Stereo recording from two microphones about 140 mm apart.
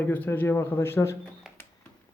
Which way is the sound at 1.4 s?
5° right (ahead or behind).